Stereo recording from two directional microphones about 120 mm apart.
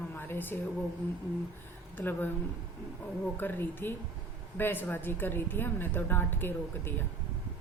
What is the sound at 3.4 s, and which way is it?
Speech, 15° left (ahead or behind).